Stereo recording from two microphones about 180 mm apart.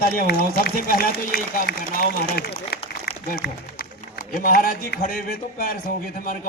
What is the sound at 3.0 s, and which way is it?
Applause, 60° left (ahead or behind).